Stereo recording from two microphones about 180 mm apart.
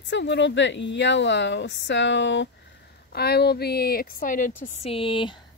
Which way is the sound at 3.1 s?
65° left (ahead or behind).